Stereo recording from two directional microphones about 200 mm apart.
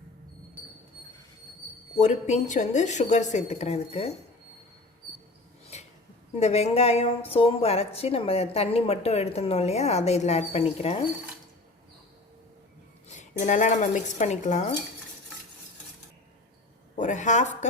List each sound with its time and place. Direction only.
2.0 s a woman's voice: 35° left (ahead or behind)
5.7 s a sound: 35° left (ahead or behind)
6.4 s a woman's voice: 30° left (ahead or behind)
13.1 s a woman's voice: 40° left (ahead or behind)
16.9 s a woman's voice: 40° left (ahead or behind)